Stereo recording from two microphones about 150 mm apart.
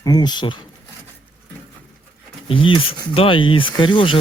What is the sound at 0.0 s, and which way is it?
Speech, 25° left (ahead or behind).